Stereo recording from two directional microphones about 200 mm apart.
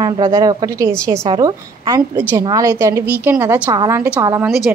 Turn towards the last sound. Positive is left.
turn(degrees=-15)  # may be behind; listen again after turning